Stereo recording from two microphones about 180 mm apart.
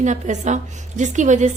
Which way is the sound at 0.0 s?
40° right (ahead or behind).